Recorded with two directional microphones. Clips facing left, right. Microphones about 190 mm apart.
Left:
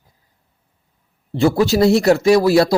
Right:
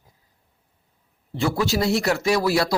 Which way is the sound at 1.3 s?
30° left (ahead or behind).